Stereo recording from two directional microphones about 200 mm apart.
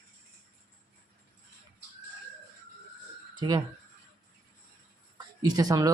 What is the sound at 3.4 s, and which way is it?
Speech, 25° right (ahead or behind).